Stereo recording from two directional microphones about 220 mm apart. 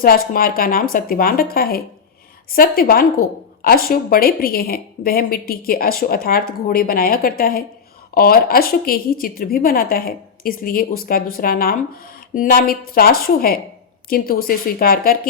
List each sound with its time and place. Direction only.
0.0 s a woman's voice: 40° left (ahead or behind)